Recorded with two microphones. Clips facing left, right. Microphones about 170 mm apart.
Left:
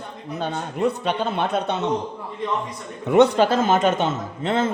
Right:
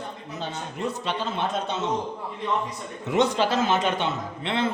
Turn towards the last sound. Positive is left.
turn(degrees=45)  # may be behind; listen again after turning